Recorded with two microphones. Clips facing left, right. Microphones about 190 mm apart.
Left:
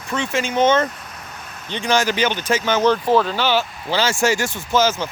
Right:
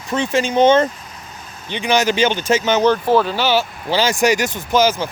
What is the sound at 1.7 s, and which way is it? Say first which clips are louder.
Speech: right 2 dB; 15° right (ahead or behind).